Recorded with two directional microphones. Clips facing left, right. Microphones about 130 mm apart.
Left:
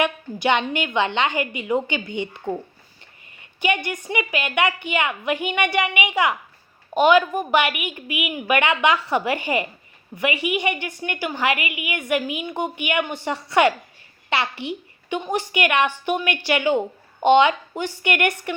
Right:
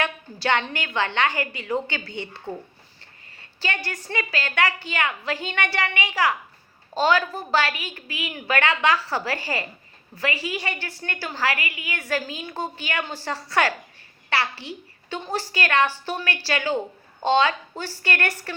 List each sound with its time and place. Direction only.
0.0 s a woman's voice: 15° left (ahead or behind)